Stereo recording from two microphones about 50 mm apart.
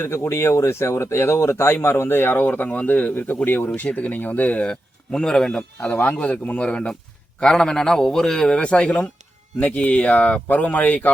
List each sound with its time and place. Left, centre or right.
0.0 s speech: left
2.4 s speech: left
4.6 s a man's voice: centre
7.4 s a man's voice: centre; by 11.1 s left